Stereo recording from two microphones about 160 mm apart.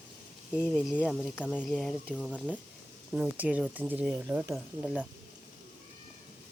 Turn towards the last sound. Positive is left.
turn(degrees=-5)  # may be behind; listen again after turning